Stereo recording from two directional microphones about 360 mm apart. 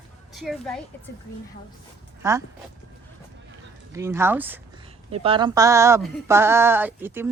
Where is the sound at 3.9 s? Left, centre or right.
Centre.